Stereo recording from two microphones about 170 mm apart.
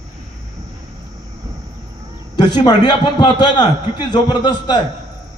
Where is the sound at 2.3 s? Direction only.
25° left (ahead or behind).